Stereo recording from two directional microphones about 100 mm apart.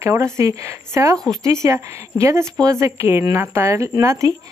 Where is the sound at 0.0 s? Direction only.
30° right (ahead or behind).